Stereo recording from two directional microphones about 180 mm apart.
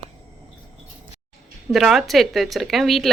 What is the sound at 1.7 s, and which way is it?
Speech, centre (ahead or behind).